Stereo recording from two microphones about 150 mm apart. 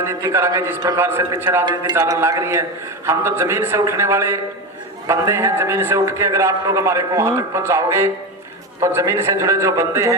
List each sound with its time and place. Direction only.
0.0 s a man's voice: 15° right (ahead or behind)
1.9 s a man's voice: 25° right (ahead or behind)